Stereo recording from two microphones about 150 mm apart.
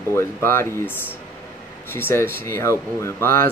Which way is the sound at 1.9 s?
15° left (ahead or behind).